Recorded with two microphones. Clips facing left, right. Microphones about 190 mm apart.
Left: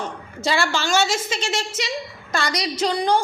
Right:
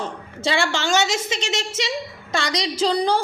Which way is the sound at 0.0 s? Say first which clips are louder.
Right 1 dB; 25° right (ahead or behind).